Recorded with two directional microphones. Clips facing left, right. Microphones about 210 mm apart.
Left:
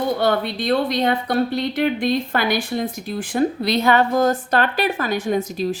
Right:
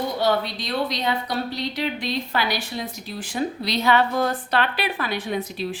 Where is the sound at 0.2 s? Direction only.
55° left (ahead or behind).